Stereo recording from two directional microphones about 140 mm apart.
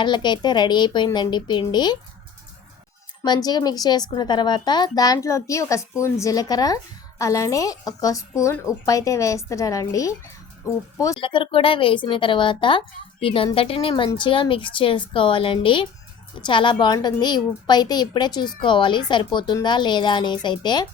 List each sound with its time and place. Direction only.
0.0 s a woman's voice: 35° left (ahead or behind)
3.2 s a woman's voice: 30° left (ahead or behind)
11.2 s a woman's voice: 35° left (ahead or behind)